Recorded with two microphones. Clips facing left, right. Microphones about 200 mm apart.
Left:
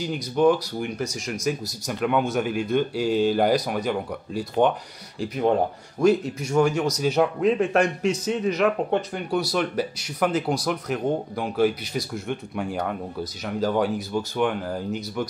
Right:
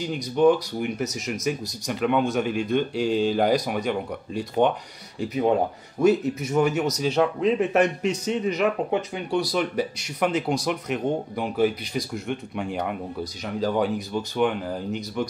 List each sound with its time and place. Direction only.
0.0 s a man's voice: 5° left (ahead or behind)